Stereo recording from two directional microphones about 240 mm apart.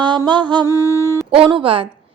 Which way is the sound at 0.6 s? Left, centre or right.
Centre.